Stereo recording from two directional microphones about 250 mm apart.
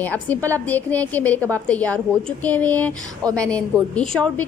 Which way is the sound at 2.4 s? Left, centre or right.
Centre.